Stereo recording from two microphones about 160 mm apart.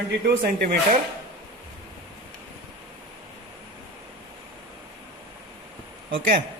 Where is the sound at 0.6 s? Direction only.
70° right (ahead or behind).